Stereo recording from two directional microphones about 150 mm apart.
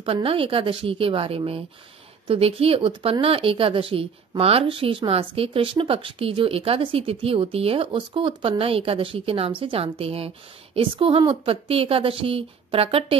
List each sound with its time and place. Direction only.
0.0 s speech: 40° right (ahead or behind)